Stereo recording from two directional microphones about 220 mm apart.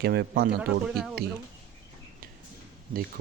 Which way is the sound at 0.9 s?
Centre (ahead or behind).